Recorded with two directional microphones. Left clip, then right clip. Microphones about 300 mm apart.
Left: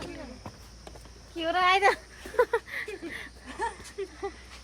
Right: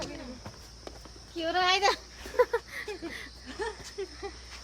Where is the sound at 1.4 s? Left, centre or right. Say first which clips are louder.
Left 3 dB; centre.